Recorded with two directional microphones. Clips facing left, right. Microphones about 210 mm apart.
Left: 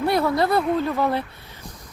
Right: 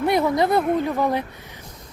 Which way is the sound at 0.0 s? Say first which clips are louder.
Right 1 dB; 20° right (ahead or behind).